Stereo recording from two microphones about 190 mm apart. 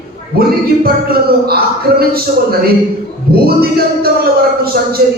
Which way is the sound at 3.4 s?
55° right (ahead or behind).